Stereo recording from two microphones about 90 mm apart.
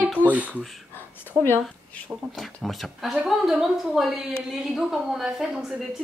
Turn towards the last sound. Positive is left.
turn(degrees=-5)  # may be behind; listen again after turning